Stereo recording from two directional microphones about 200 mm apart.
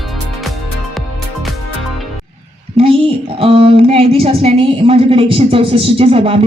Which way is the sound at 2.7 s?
30° right (ahead or behind).